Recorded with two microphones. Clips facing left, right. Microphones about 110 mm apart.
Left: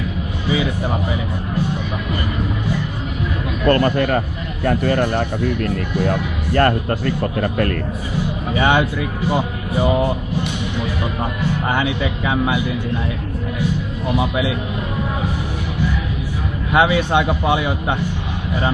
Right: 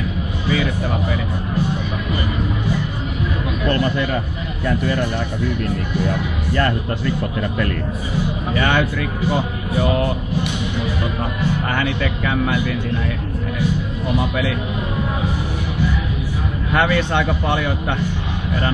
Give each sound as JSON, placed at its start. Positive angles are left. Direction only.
{"t": 3.6, "sound": "speech", "side_deg": 50}
{"t": 8.5, "sound": "speech", "side_deg": 15}
{"t": 11.6, "sound": "speech", "side_deg": 10}
{"t": 14.1, "sound": "speech", "side_deg": 10}
{"t": 16.7, "sound": "speech", "side_deg": 10}